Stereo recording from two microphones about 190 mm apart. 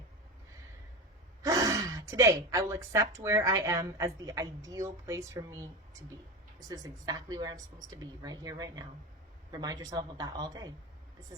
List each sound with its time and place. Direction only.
1.4 s a woman's voice: 15° right (ahead or behind)